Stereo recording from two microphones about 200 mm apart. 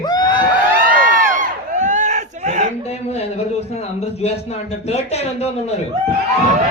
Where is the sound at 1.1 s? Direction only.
40° right (ahead or behind).